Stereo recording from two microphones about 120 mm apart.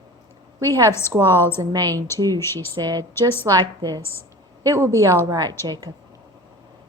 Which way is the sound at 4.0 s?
20° left (ahead or behind).